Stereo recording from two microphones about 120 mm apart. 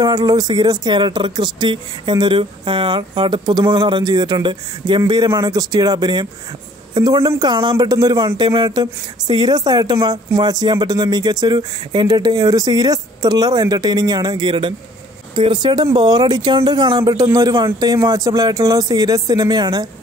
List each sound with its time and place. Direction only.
0.0 s speech: 35° right (ahead or behind)